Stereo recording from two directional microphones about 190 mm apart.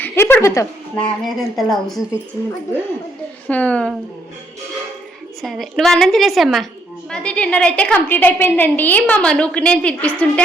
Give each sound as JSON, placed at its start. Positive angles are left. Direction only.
{"t": 0.0, "sound": "a sound", "side_deg": 10}
{"t": 1.2, "sound": "a woman's voice", "side_deg": 0}
{"t": 2.4, "sound": "a woman's voice", "side_deg": 15}
{"t": 5.4, "sound": "a woman's voice", "side_deg": 0}